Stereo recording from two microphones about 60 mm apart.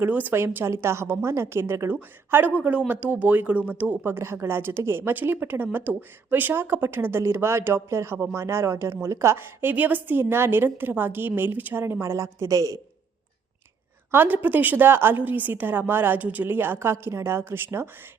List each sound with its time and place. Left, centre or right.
0.0 s speech: right
0.3 s a woman's voice: right
1.9 s speech: right
4.0 s a woman's voice: right
12.1 s a woman's voice: right
14.1 s speech: right